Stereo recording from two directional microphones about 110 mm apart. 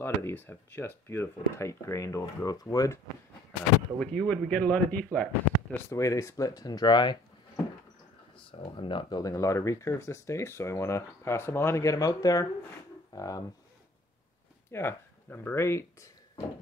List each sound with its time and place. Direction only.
0.0 s speech: 20° left (ahead or behind)
4.0 s a man's voice: 10° left (ahead or behind)
5.9 s speech: 30° left (ahead or behind)
8.5 s speech: 50° left (ahead or behind)
9.2 s speech: 30° left (ahead or behind)
14.7 s speech: 20° left (ahead or behind)